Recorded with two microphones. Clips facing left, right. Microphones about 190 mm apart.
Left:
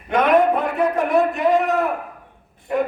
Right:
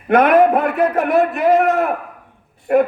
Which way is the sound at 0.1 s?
60° right (ahead or behind).